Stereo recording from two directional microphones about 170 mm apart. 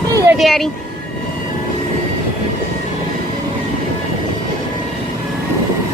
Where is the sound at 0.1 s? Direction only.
20° right (ahead or behind).